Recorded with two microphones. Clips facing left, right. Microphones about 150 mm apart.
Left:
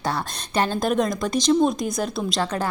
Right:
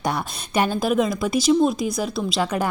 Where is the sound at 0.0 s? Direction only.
15° right (ahead or behind).